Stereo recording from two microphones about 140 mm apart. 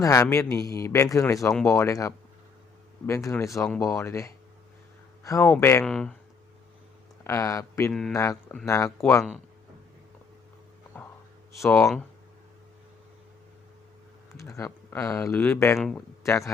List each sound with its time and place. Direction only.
0.0 s a man's voice: 25° left (ahead or behind)
5.8 s speech: 5° left (ahead or behind)
7.3 s a man's voice: 20° left (ahead or behind)
10.9 s a sound: 10° left (ahead or behind)
11.5 s a man's voice: 20° left (ahead or behind)
14.3 s a man's voice: 20° left (ahead or behind)